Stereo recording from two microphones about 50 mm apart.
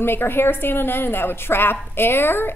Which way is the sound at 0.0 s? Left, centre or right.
Left.